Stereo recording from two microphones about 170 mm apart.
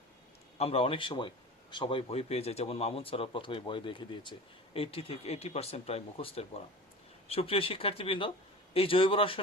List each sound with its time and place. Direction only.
0.6 s speech: 35° left (ahead or behind)